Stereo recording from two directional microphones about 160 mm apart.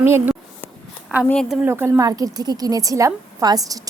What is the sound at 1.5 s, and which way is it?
A woman's voice, 10° right (ahead or behind).